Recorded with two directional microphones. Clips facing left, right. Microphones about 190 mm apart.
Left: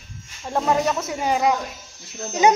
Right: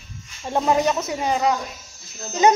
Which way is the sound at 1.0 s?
5° left (ahead or behind).